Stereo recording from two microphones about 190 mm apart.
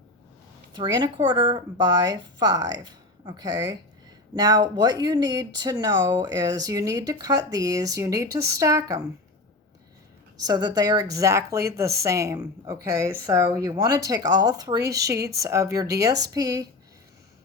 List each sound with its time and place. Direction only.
0.7 s a woman's voice: 25° right (ahead or behind)
10.3 s a woman's voice: 20° right (ahead or behind)